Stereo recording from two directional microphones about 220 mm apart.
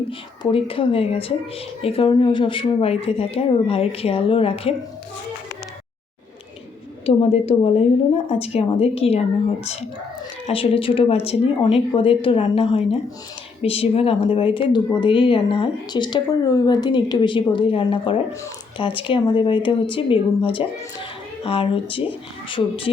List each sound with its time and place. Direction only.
0.1 s speech: 25° left (ahead or behind)
7.0 s speech: 25° left (ahead or behind)
10.4 s speech: 25° left (ahead or behind)